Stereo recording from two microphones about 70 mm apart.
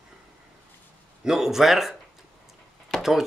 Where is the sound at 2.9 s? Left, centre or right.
Centre.